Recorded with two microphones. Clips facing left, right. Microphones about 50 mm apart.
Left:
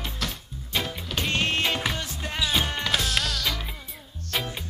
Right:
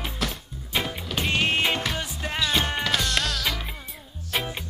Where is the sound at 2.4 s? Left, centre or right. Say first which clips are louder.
Right 1 dB; centre.